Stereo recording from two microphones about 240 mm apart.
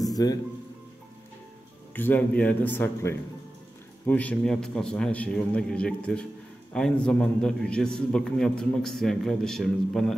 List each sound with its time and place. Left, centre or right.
0.0 s music: centre
2.0 s a man's voice: centre